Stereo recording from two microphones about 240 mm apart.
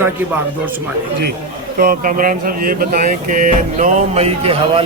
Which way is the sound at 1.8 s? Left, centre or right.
Right.